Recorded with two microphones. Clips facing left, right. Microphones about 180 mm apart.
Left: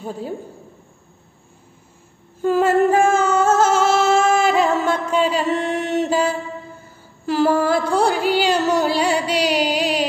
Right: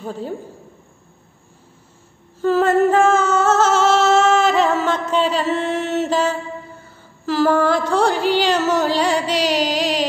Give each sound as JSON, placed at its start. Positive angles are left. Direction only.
{"t": 0.0, "sound": "a woman's voice", "side_deg": 10}
{"t": 2.4, "sound": "singing", "side_deg": 10}